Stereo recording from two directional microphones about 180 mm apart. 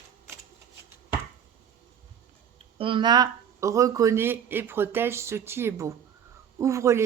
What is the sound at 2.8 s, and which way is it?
Speech, 25° right (ahead or behind).